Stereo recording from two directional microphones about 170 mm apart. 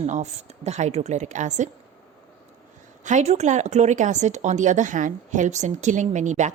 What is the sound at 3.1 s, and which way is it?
Speech, 40° right (ahead or behind).